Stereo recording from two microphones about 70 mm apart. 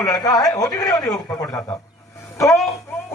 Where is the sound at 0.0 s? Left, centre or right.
Left.